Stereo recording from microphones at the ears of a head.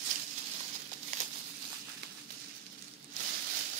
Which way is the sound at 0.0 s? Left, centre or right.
Right.